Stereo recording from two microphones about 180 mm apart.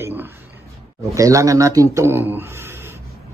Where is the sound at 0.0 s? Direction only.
10° right (ahead or behind).